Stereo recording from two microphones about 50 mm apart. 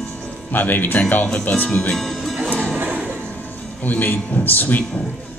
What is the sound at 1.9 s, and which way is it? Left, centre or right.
Music, centre.